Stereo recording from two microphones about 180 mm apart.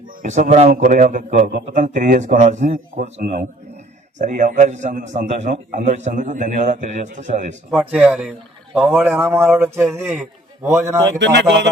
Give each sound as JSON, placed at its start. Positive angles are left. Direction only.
{"t": 0.1, "sound": "a man's voice", "side_deg": -45}
{"t": 7.9, "sound": "speech", "side_deg": -5}
{"t": 11.2, "sound": "speech", "side_deg": -75}